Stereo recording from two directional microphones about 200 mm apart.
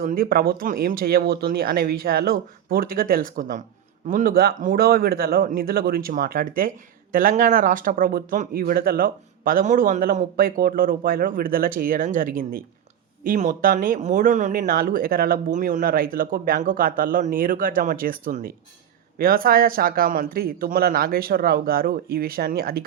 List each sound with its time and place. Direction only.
0.0 s speech: 45° right (ahead or behind)